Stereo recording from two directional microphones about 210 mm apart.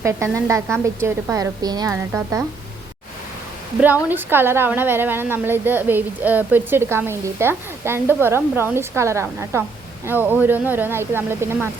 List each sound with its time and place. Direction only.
0.0 s a woman's voice: 15° right (ahead or behind)
4.1 s a woman's voice: 10° right (ahead or behind)